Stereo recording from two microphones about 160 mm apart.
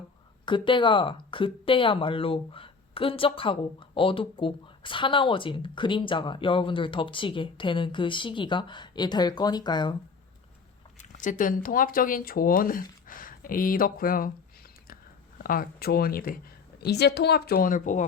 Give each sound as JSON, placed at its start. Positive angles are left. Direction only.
{"t": 0.4, "sound": "speech", "side_deg": 30}
{"t": 11.1, "sound": "speech", "side_deg": 50}
{"t": 15.4, "sound": "speech", "side_deg": 65}
{"t": 16.8, "sound": "a woman's voice", "side_deg": 90}